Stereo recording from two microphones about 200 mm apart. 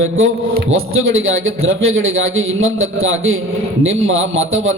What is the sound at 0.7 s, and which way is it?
A man's voice, 75° right (ahead or behind).